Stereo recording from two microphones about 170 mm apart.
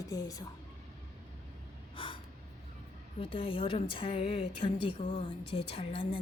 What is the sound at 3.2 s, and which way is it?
Speech, 35° left (ahead or behind).